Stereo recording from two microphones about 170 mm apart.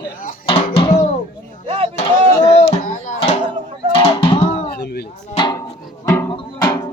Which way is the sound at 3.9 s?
30° left (ahead or behind).